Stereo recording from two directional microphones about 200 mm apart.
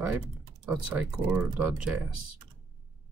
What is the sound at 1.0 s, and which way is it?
Speech, 10° right (ahead or behind).